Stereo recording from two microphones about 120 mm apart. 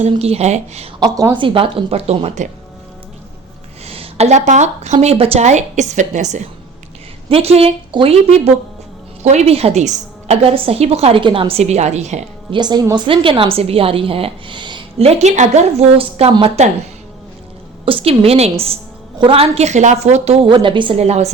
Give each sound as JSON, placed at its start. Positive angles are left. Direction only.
{"t": 0.2, "sound": "a woman's voice", "side_deg": -60}
{"t": 0.9, "sound": "a woman's voice", "side_deg": -35}
{"t": 1.4, "sound": "a woman's voice", "side_deg": -45}
{"t": 3.8, "sound": "speech", "side_deg": -55}
{"t": 7.3, "sound": "a woman's voice", "side_deg": -55}
{"t": 9.2, "sound": "a woman's voice", "side_deg": -65}
{"t": 10.4, "sound": "a woman's voice", "side_deg": -50}
{"t": 11.2, "sound": "a woman's voice", "side_deg": -45}
{"t": 12.5, "sound": "a woman's voice", "side_deg": -35}
{"t": 13.1, "sound": "a woman's voice", "side_deg": -45}
{"t": 14.9, "sound": "a woman's voice", "side_deg": -55}
{"t": 16.0, "sound": "a woman's voice", "side_deg": -55}
{"t": 17.8, "sound": "a woman's voice", "side_deg": -50}
{"t": 20.5, "sound": "a woman's voice", "side_deg": -40}